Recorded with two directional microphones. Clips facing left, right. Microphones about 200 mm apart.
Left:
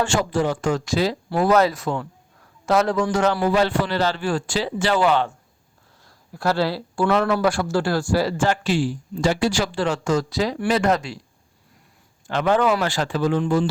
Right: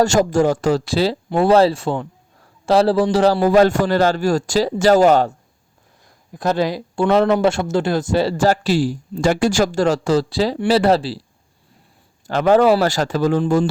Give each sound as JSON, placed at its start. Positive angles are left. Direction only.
{"t": 0.0, "sound": "a man's voice", "side_deg": -45}
{"t": 6.1, "sound": "a man's voice", "side_deg": -20}
{"t": 12.3, "sound": "a man's voice", "side_deg": -40}